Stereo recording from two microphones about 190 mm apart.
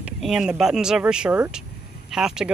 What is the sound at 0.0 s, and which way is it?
Speech, 5° right (ahead or behind).